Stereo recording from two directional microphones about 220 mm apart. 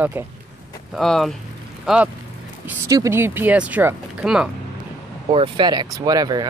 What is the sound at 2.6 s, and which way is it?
Speech, 15° right (ahead or behind).